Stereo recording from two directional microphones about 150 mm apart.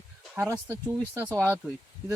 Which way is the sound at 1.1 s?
20° right (ahead or behind).